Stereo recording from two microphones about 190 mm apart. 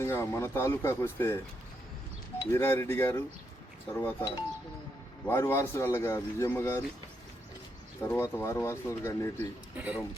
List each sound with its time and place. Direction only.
0.0 s speech: 15° left (ahead or behind)
2.4 s speech: 15° left (ahead or behind)
8.0 s speech: 10° left (ahead or behind)
9.7 s speech: 10° right (ahead or behind)